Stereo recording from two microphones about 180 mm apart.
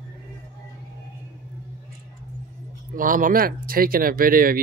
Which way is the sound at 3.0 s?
50° right (ahead or behind).